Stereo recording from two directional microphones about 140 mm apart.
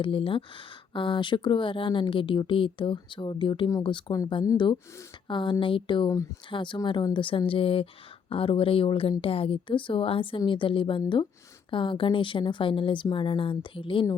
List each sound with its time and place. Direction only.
0.0 s speech: 40° left (ahead or behind)